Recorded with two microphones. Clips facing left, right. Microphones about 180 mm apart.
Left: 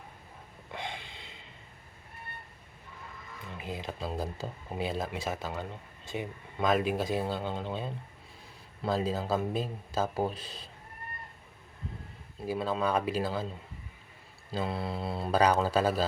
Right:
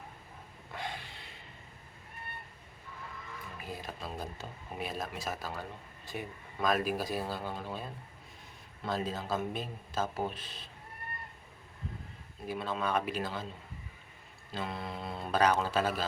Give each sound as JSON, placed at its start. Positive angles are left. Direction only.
{"t": 0.8, "sound": "snort", "side_deg": 20}
{"t": 3.6, "sound": "speech", "side_deg": 20}
{"t": 12.5, "sound": "speech", "side_deg": 30}
{"t": 14.5, "sound": "speech", "side_deg": 30}